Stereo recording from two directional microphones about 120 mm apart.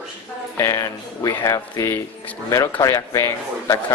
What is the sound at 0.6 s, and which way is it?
A man's voice, 25° left (ahead or behind).